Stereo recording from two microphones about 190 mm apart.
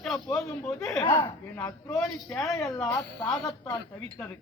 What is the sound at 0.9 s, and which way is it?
A man's voice, 15° left (ahead or behind).